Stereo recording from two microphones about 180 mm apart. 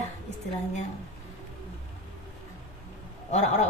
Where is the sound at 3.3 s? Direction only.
40° left (ahead or behind).